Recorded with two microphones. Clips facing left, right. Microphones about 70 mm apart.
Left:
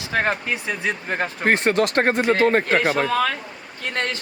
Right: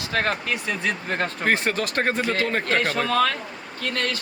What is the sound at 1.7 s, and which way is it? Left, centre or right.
Speech, left.